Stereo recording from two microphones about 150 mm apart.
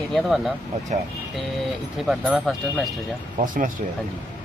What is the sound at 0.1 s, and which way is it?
Speech, centre (ahead or behind).